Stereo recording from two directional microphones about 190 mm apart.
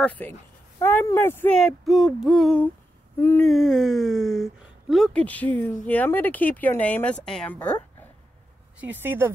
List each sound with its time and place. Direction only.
0.0 s speech: 10° left (ahead or behind)
3.5 s speech: centre (ahead or behind)
9.0 s speech: 10° right (ahead or behind)